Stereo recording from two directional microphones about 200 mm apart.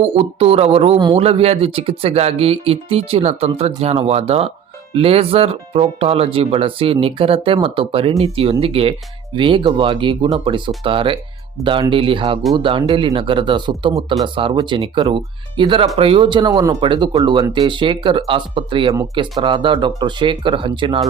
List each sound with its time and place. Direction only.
0.0 s speech: 30° right (ahead or behind)